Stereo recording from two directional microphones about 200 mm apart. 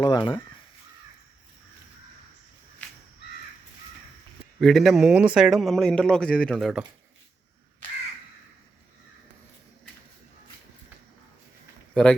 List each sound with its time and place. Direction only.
0.0 s speech: 25° left (ahead or behind)
4.6 s a man's voice: centre (ahead or behind)